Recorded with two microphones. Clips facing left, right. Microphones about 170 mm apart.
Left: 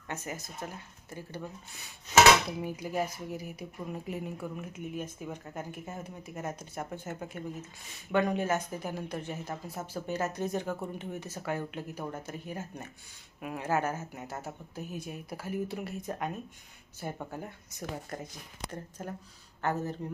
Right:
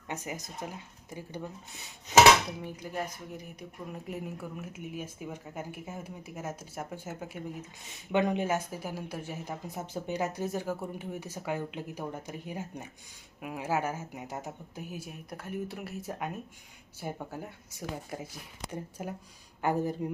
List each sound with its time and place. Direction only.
0.1 s speech: 15° right (ahead or behind)
2.5 s speech: 10° left (ahead or behind); by 20.1 s 10° right (ahead or behind)